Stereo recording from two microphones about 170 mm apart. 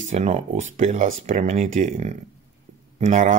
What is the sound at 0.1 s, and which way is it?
Speech, 40° right (ahead or behind).